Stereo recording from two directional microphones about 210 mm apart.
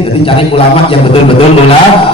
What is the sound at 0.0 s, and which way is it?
Speech, 25° left (ahead or behind).